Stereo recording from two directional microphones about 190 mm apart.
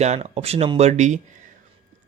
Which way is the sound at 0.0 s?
35° right (ahead or behind).